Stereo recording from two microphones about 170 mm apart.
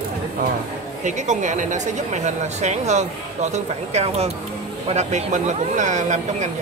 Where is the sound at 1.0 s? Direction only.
45° right (ahead or behind).